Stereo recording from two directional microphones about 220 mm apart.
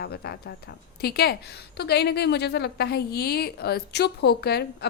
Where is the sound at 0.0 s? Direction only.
45° left (ahead or behind).